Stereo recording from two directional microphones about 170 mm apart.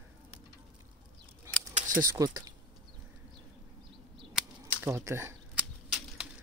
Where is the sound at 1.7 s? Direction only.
50° right (ahead or behind).